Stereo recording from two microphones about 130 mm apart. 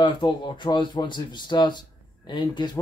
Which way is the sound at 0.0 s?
35° left (ahead or behind).